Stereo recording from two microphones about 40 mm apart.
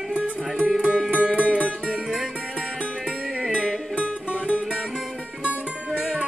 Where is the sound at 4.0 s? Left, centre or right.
Right.